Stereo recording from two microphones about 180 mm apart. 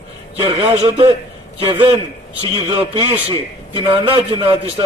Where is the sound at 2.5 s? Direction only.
30° right (ahead or behind).